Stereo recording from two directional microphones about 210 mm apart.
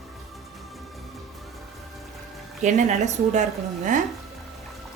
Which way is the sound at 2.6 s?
35° right (ahead or behind).